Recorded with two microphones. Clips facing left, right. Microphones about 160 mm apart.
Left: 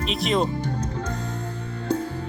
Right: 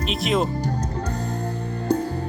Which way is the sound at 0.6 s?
35° right (ahead or behind).